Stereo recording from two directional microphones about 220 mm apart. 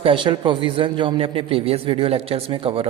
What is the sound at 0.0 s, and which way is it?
A woman's voice, 20° right (ahead or behind).